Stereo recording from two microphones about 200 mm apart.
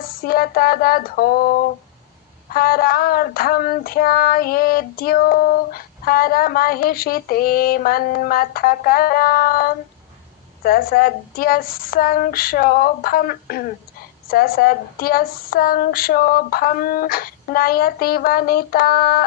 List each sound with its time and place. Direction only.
0.0 s child singing: 45° left (ahead or behind)